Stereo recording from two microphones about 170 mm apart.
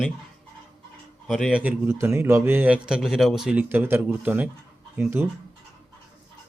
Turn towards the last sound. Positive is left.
turn(degrees=-10)  # may be behind; listen again after turning